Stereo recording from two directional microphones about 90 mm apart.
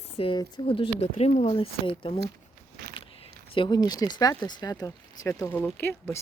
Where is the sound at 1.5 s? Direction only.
90° left.